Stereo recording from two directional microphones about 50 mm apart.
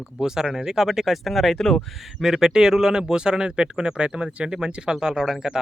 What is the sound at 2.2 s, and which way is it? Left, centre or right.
Speech, centre.